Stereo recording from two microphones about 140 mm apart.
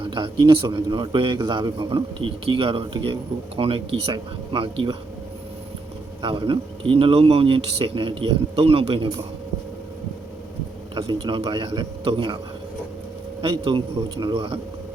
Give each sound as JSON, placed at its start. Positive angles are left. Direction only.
{"t": 0.0, "sound": "a man's voice", "side_deg": -35}
{"t": 6.2, "sound": "a man's voice", "side_deg": -35}
{"t": 10.9, "sound": "a man's voice", "side_deg": -30}
{"t": 13.4, "sound": "a man's voice", "side_deg": -40}